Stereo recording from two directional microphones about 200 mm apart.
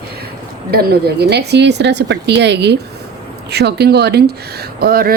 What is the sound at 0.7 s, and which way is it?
A woman's voice, 50° right (ahead or behind).